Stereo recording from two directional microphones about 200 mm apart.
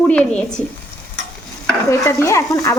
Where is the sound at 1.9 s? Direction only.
15° left (ahead or behind).